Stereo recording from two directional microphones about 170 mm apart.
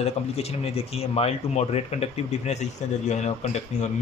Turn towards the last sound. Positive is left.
turn(degrees=40)  # may be behind; listen again after turning